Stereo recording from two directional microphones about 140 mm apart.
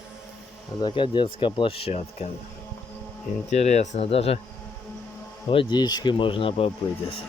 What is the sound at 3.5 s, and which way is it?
Speech, 55° left (ahead or behind).